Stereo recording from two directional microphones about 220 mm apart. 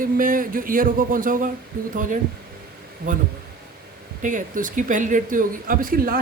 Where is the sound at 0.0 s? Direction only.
40° right (ahead or behind).